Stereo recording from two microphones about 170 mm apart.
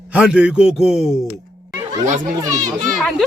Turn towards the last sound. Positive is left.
turn(degrees=0)  # may be behind; listen again after turning